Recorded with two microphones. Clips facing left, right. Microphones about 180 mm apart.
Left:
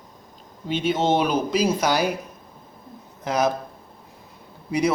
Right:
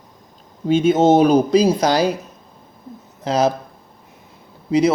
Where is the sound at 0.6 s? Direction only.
45° right (ahead or behind).